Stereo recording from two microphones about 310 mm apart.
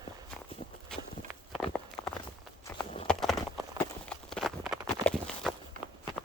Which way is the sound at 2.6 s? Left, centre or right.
Centre.